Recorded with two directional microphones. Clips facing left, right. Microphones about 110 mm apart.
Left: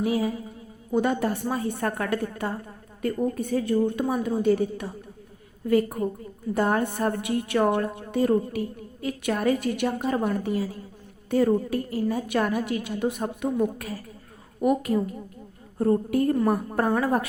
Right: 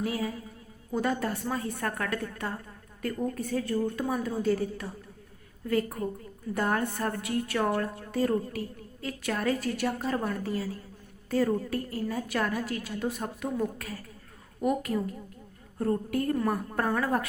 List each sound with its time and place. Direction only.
0.0 s a woman's voice: 20° left (ahead or behind)